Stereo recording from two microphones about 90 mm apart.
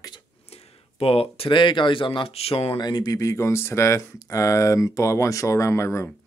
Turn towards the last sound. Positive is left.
turn(degrees=30)  # may be behind; listen again after turning